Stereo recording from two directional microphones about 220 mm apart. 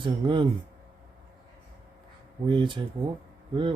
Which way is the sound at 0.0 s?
20° right (ahead or behind).